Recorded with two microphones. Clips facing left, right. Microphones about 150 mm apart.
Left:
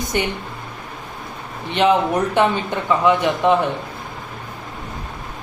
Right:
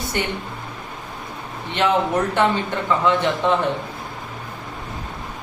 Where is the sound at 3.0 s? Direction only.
15° left (ahead or behind).